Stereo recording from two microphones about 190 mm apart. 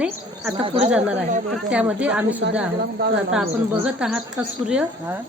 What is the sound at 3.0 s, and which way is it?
Speech, 55° right (ahead or behind).